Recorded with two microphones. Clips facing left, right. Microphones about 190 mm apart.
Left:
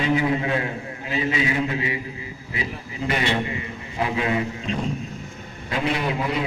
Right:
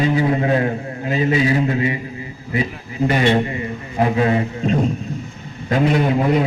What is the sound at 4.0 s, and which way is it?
A man's voice, 40° right (ahead or behind).